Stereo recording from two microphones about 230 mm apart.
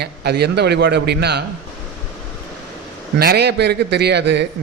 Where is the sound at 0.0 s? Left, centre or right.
Right.